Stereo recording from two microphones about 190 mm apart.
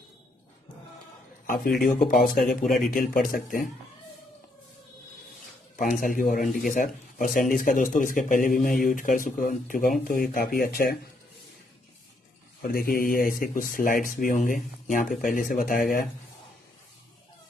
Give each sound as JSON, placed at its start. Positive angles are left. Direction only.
{"t": 1.4, "sound": "a sound", "side_deg": 45}
{"t": 1.8, "sound": "speech", "side_deg": 45}
{"t": 5.8, "sound": "speech", "side_deg": 45}
{"t": 12.6, "sound": "speech", "side_deg": 50}